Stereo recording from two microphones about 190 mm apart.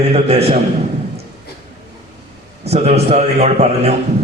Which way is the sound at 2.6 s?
35° right (ahead or behind).